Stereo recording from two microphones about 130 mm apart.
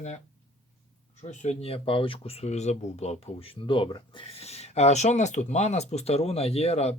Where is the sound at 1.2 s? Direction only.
65° left (ahead or behind).